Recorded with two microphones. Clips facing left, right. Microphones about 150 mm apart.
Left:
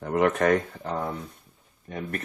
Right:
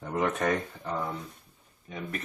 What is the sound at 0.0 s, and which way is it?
Speech, 70° left (ahead or behind).